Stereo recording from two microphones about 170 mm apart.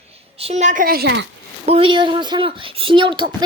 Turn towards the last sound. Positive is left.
turn(degrees=-30)  # may be behind; listen again after turning